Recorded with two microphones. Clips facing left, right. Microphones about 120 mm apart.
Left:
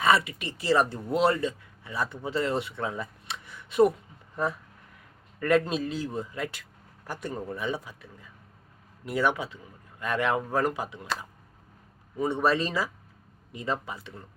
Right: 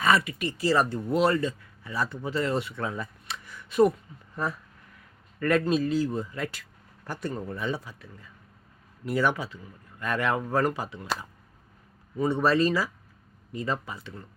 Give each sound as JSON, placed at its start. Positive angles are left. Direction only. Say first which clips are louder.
{"t": 0.0, "sound": "speech", "louder": "even", "side_deg": 20}
{"t": 5.4, "sound": "a man's voice", "louder": "right 1 dB", "side_deg": 20}
{"t": 12.2, "sound": "a man's voice", "louder": "right 2 dB", "side_deg": 20}